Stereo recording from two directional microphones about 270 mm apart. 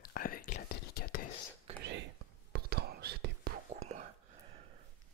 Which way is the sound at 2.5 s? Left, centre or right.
Right.